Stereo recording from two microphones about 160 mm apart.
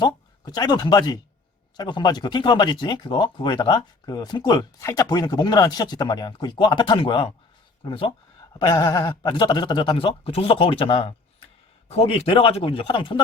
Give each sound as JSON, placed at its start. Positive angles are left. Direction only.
{"t": 0.0, "sound": "speech", "side_deg": 25}